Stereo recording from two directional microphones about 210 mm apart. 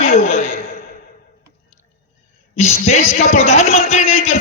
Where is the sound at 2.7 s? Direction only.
30° left (ahead or behind).